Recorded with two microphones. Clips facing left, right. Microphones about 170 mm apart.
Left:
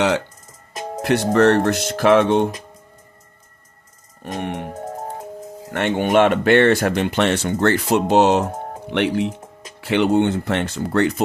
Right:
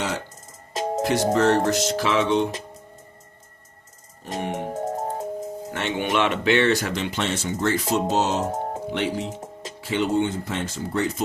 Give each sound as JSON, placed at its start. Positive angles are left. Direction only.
{"t": 0.7, "sound": "music", "side_deg": -25}
{"t": 1.0, "sound": "speech", "side_deg": 65}
{"t": 4.2, "sound": "music", "side_deg": 60}
{"t": 4.7, "sound": "music", "side_deg": -25}
{"t": 5.7, "sound": "speech", "side_deg": 50}
{"t": 8.5, "sound": "music", "side_deg": -25}
{"t": 8.9, "sound": "speech", "side_deg": 65}